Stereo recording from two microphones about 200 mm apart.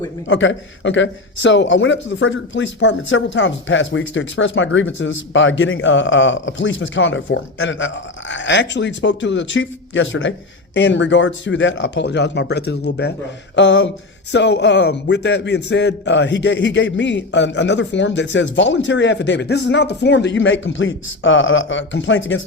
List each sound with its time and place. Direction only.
0.3 s a man's voice: 70° left (ahead or behind)